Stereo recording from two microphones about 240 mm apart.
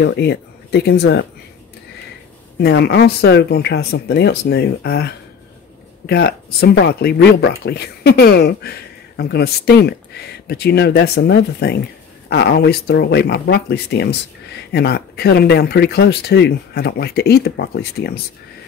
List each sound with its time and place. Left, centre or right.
0.0 s speech: left
2.6 s speech: left